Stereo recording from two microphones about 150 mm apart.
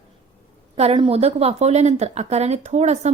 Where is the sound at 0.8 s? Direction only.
40° right (ahead or behind).